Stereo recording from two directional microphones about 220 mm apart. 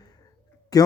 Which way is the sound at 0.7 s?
15° left (ahead or behind).